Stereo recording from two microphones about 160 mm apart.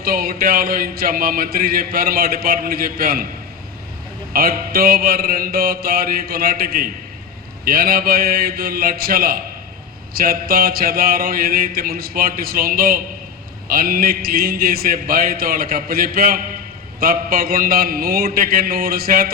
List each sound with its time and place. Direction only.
0.0 s speech: 65° right (ahead or behind)
4.3 s speech: 65° right (ahead or behind)